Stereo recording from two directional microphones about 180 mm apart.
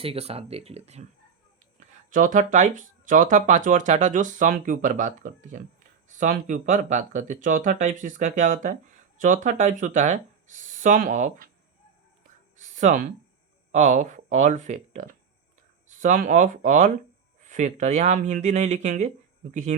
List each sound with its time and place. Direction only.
0.0 s speech: 35° right (ahead or behind)
2.1 s speech: 45° right (ahead or behind)
12.5 s a sound: 40° right (ahead or behind)
13.7 s speech: 45° right (ahead or behind)